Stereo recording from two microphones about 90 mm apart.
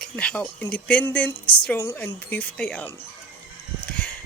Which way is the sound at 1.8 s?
30° left (ahead or behind).